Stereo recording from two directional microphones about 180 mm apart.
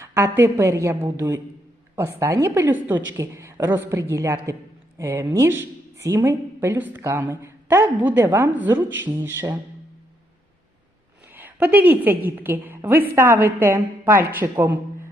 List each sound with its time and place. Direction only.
0.0 s speech: 15° right (ahead or behind)
11.3 s speech: 10° right (ahead or behind)